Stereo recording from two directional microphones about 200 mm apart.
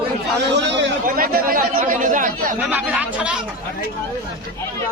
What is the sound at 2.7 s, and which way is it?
Speech, 5° right (ahead or behind).